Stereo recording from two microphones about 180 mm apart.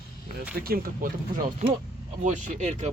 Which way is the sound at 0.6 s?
55° right (ahead or behind).